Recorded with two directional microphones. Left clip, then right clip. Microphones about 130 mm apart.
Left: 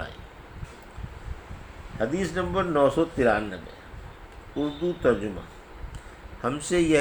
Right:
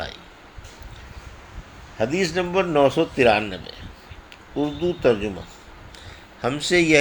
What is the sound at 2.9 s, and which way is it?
Speech, 80° right.